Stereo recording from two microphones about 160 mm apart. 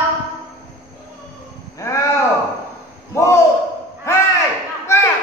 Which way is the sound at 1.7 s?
20° left (ahead or behind).